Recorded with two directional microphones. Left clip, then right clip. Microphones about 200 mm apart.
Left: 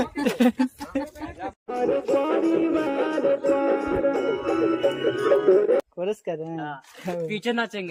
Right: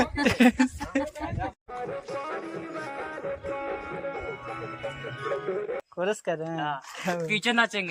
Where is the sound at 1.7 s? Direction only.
50° left (ahead or behind).